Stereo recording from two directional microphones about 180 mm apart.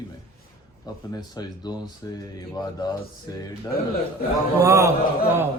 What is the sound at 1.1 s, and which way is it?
Speech, 20° left (ahead or behind).